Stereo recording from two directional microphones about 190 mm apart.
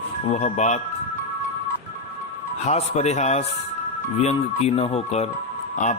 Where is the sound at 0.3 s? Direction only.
40° left (ahead or behind).